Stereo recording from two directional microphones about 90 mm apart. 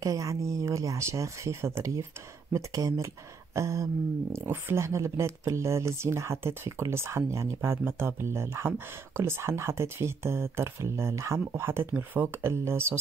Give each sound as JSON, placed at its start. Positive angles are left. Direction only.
{"t": 0.0, "sound": "speech", "side_deg": -40}